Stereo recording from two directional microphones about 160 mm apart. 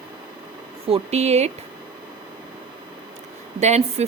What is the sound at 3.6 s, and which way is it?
Speech, 45° right (ahead or behind).